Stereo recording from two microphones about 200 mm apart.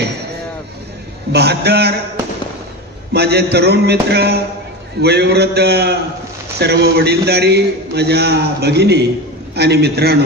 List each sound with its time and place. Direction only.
1.3 s a man's voice: 55° right (ahead or behind)
3.1 s a man's voice: 55° right (ahead or behind)